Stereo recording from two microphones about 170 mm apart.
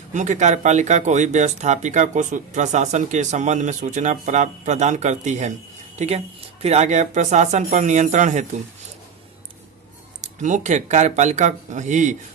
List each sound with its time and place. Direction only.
0.1 s speech: 45° right (ahead or behind)
10.2 s speech: 45° right (ahead or behind)